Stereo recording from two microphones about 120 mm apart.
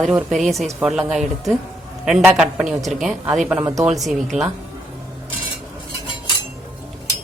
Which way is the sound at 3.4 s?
15° right (ahead or behind).